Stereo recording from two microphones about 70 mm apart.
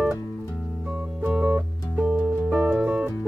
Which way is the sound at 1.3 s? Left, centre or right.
Right.